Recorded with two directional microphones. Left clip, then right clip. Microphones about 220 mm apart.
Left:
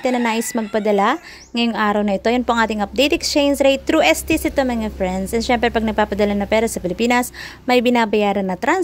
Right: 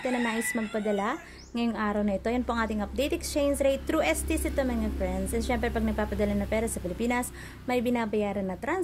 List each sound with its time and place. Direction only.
0.0 s a woman's voice: 40° left (ahead or behind)